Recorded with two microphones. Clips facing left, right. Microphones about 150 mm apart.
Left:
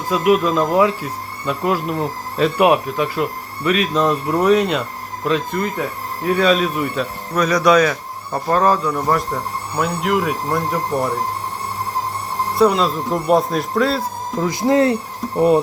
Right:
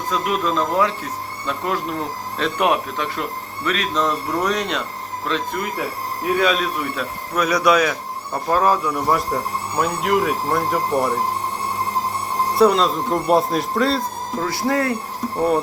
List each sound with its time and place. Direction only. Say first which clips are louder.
0.1 s speech: left 6 dB; 10° left (ahead or behind)
12.5 s speech: even; centre (ahead or behind)
14.4 s speech: left 6 dB; 20° left (ahead or behind)